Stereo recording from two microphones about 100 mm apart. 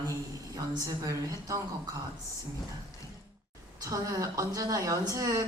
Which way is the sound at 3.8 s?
35° right (ahead or behind).